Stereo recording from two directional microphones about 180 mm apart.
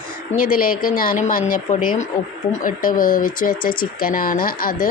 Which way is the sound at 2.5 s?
50° left (ahead or behind).